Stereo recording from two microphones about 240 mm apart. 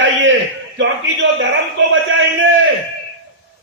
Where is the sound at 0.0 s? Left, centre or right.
Right.